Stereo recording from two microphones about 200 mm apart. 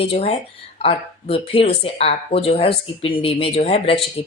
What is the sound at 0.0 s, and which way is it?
Speech, 30° left (ahead or behind).